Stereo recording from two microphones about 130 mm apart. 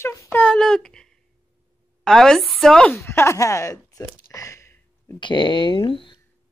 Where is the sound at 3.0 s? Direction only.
20° left (ahead or behind).